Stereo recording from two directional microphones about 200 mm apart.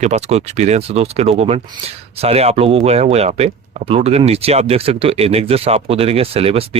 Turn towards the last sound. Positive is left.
turn(degrees=-30)  # may be behind; listen again after turning